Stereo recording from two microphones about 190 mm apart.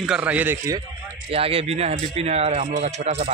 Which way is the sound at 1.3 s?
30° right (ahead or behind).